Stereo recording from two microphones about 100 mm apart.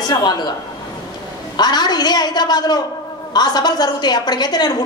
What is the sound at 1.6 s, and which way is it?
A woman's voice, 45° left (ahead or behind).